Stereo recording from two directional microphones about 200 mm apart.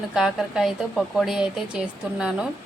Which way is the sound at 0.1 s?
Centre (ahead or behind).